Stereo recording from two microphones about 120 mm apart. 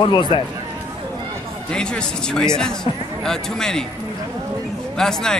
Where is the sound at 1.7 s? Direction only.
5° left (ahead or behind).